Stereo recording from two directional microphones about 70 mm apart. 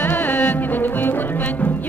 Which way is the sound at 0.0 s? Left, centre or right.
Left.